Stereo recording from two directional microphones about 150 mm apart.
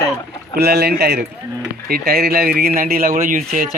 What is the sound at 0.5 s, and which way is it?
Speech, 90° right.